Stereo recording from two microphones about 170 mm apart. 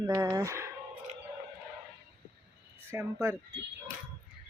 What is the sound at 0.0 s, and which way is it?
Speech, 15° right (ahead or behind).